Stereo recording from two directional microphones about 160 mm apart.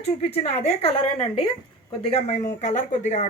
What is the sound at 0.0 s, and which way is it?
A woman's voice, 40° left (ahead or behind).